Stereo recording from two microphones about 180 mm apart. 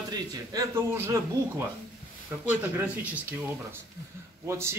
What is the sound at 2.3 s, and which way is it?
Speech, 10° right (ahead or behind).